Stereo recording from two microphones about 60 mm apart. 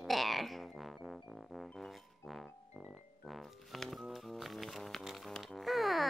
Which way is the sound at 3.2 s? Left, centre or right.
Centre.